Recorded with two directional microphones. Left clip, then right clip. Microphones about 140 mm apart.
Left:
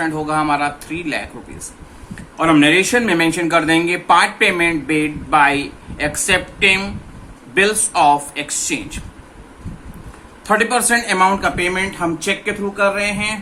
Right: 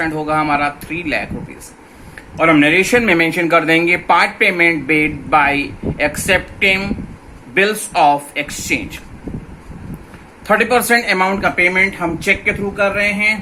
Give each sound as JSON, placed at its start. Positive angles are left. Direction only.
{"t": 0.0, "sound": "speech", "side_deg": -20}
{"t": 2.4, "sound": "speech", "side_deg": -25}
{"t": 10.4, "sound": "speech", "side_deg": -30}